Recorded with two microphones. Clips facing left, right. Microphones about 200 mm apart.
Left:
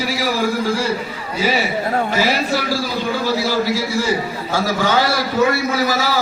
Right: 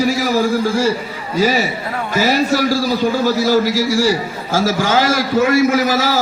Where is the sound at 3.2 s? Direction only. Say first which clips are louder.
Right 3 dB; 45° right (ahead or behind).